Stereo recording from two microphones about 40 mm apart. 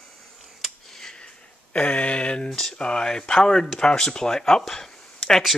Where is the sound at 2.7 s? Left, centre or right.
Left.